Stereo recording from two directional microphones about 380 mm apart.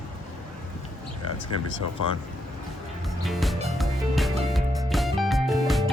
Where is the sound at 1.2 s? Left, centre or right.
Left.